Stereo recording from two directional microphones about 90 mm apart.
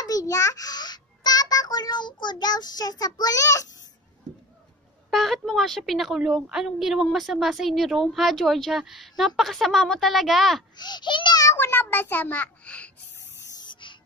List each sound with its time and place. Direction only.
0.0 s a sound: 40° left (ahead or behind)
5.1 s a woman's voice: centre (ahead or behind)
10.8 s a child's voice: 55° left (ahead or behind)
11.4 s speech: 25° left (ahead or behind)
13.5 s spray: 55° left (ahead or behind)